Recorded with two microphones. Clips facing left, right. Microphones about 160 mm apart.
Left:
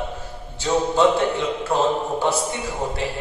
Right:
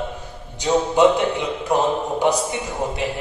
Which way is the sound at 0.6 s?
15° right (ahead or behind).